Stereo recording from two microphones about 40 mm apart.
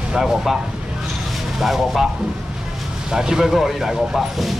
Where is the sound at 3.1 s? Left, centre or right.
Centre.